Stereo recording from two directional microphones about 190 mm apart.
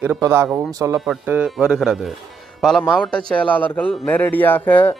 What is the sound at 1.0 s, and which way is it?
Speech, 5° right (ahead or behind).